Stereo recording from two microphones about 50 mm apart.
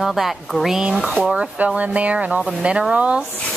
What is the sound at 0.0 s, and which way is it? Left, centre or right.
Speech, centre.